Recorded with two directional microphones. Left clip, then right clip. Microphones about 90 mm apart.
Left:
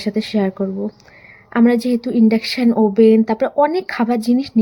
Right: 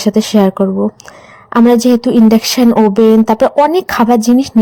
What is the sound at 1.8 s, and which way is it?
A woman's voice, 55° right (ahead or behind).